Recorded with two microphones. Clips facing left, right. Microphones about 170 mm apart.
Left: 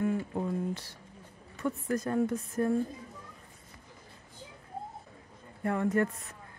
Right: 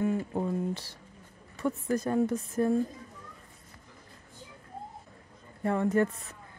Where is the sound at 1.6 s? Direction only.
25° right (ahead or behind).